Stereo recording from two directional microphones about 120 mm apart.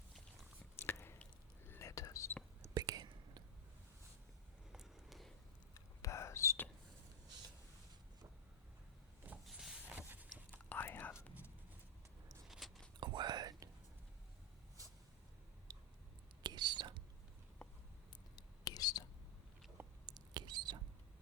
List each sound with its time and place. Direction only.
0.8 s squish: 20° left (ahead or behind)
1.2 s whispering: 20° left (ahead or behind)
2.7 s whispering: 35° right (ahead or behind)
4.7 s a sound: 5° right (ahead or behind)
5.7 s whispering: 25° left (ahead or behind)
9.5 s a sound: 5° right (ahead or behind)
10.7 s whispering: 20° left (ahead or behind)
12.5 s a sound: centre (ahead or behind)
13.0 s whispering: 35° right (ahead or behind)
16.4 s whispering: 35° right (ahead or behind)
18.3 s whispering: 35° left (ahead or behind)
20.1 s rodents: 35° right (ahead or behind)